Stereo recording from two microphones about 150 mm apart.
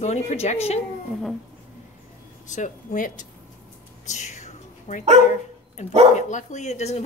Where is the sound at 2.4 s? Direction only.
55° left (ahead or behind).